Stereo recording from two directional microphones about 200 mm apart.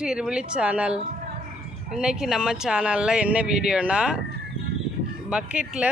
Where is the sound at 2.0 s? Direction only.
5° right (ahead or behind).